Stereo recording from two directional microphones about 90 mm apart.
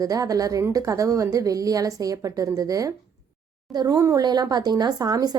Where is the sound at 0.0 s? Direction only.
40° right (ahead or behind).